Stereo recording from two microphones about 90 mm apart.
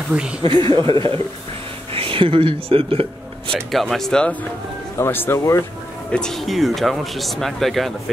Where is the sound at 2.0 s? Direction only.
90° right.